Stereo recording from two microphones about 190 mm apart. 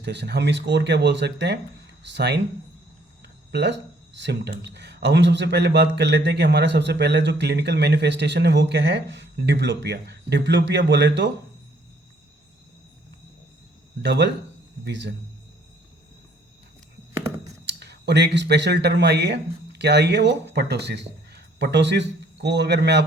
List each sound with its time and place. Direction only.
0.0 s speech: 60° right (ahead or behind)
3.5 s speech: 65° right (ahead or behind)
14.0 s speech: 65° right (ahead or behind)
17.2 s a sound: 15° right (ahead or behind)
17.7 s speech: 60° right (ahead or behind)